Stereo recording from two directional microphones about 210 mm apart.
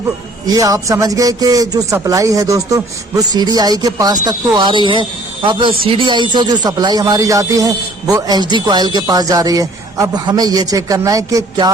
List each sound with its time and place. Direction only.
0.4 s speech: 15° right (ahead or behind)